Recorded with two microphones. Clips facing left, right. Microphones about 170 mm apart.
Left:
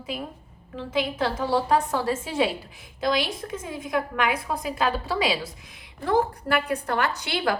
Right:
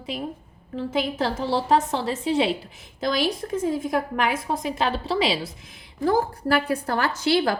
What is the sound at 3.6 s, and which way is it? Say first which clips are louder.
Speech: right 4 dB; 30° right (ahead or behind).